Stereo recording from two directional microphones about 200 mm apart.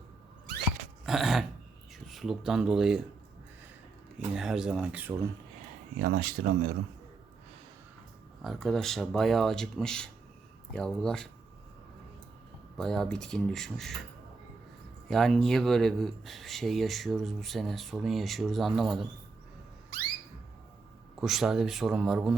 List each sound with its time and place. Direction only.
1.0 s dog: centre (ahead or behind)
2.0 s speech: centre (ahead or behind)
4.4 s speech: 5° right (ahead or behind)
6.0 s speech: 50° right (ahead or behind)
8.4 s speech: centre (ahead or behind)
12.7 s speech: centre (ahead or behind)
15.1 s speech: centre (ahead or behind)
21.2 s speech: centre (ahead or behind)